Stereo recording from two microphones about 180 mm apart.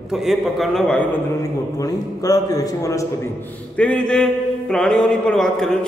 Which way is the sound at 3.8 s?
5° left (ahead or behind).